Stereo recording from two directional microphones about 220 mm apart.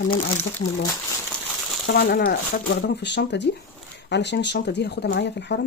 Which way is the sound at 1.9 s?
45° left (ahead or behind).